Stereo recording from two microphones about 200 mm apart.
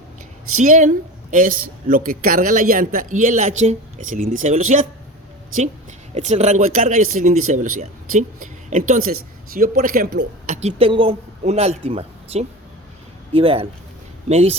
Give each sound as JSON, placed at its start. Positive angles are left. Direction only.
{"t": 0.6, "sound": "a woman's voice", "side_deg": -40}
{"t": 6.1, "sound": "a woman's voice", "side_deg": -35}